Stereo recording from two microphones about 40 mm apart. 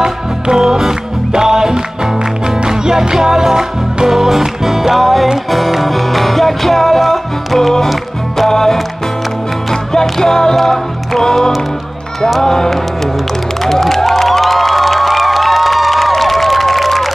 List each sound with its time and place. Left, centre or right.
0.0 s music: centre